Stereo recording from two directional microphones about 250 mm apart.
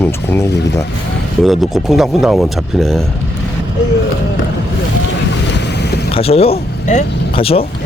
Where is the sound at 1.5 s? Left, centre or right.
Centre.